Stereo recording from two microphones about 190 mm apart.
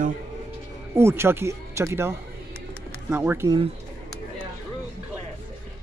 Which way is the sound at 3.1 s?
10° right (ahead or behind).